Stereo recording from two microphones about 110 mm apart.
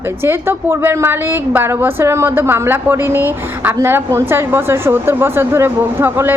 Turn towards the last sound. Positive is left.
turn(degrees=-20)  # may be behind; listen again after turning